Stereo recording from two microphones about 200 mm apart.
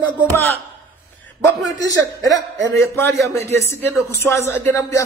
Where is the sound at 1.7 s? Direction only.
15° left (ahead or behind).